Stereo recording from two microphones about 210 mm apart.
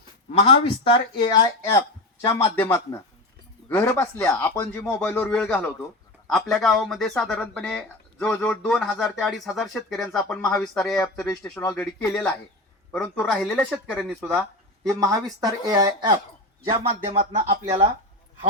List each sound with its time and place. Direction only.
0.3 s speech: 25° left (ahead or behind); by 14.4 s centre (ahead or behind)
14.8 s speech: 15° right (ahead or behind)
17.3 s speech: 30° right (ahead or behind)